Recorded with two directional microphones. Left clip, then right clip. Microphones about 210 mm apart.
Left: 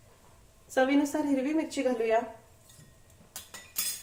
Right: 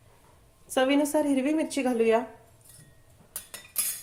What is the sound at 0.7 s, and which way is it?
A woman's voice, 40° right (ahead or behind).